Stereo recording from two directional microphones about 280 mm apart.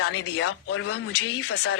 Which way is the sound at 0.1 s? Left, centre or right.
Left.